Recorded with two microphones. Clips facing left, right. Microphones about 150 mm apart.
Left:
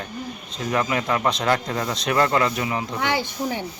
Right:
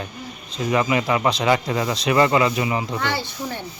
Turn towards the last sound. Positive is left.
turn(degrees=15)  # may be behind; listen again after turning